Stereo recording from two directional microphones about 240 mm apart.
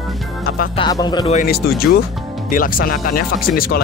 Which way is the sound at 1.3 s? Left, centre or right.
Left.